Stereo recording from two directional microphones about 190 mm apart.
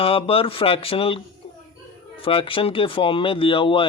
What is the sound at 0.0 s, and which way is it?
Speech, 30° left (ahead or behind).